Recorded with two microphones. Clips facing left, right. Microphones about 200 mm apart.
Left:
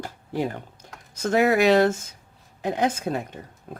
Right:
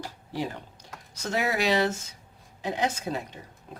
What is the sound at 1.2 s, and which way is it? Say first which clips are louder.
Speech: left 8 dB; 55° left (ahead or behind).